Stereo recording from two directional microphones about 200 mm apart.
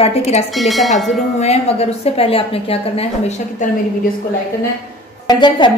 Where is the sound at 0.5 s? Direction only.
Centre (ahead or behind).